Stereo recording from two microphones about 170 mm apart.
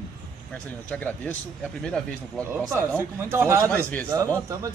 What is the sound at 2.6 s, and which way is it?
A man's voice, 15° right (ahead or behind).